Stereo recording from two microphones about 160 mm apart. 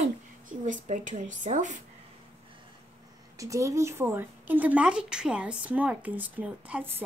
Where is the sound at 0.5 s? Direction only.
50° right (ahead or behind).